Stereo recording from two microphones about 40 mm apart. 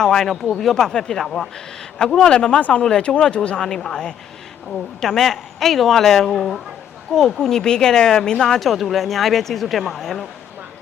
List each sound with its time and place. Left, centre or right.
0.0 s speech: centre
2.6 s speech: left
2.8 s speech: centre
3.8 s speech: centre
8.5 s speech: centre